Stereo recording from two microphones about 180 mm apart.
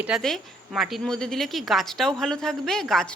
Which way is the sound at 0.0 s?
Centre (ahead or behind).